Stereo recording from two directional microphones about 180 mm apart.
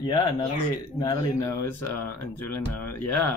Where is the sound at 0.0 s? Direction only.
25° left (ahead or behind).